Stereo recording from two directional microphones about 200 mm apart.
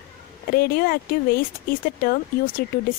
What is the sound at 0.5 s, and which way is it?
Speech, 50° left (ahead or behind).